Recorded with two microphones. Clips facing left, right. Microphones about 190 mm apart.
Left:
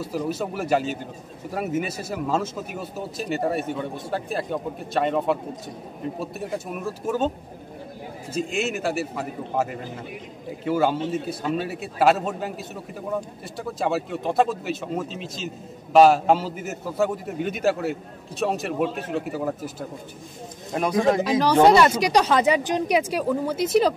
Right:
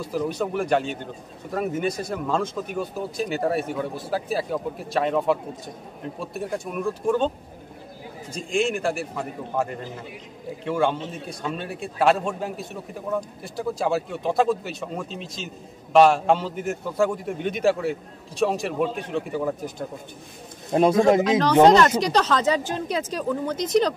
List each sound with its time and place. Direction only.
0.0 s speech: 5° left (ahead or behind)
8.3 s speech: 5° left (ahead or behind)
20.7 s a man's voice: 25° right (ahead or behind)
21.2 s a woman's voice: 10° left (ahead or behind)